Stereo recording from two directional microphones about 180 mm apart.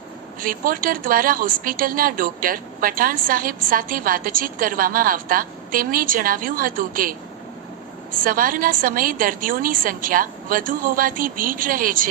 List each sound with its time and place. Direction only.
0.3 s a woman's voice: 50° right (ahead or behind)
8.2 s a woman's voice: 50° right (ahead or behind)